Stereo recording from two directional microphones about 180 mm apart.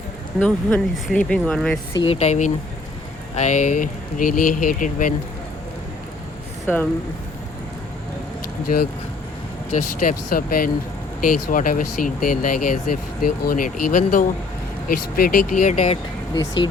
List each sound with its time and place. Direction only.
0.3 s speech: 5° left (ahead or behind)
2.0 s speech: 40° left (ahead or behind)
8.6 s speech: 55° left (ahead or behind)
16.3 s speech: 25° left (ahead or behind)